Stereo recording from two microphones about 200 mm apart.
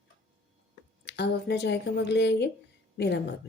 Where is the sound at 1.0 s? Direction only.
55° left (ahead or behind).